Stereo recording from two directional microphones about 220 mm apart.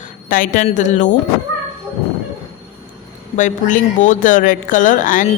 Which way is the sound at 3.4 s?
35° left (ahead or behind).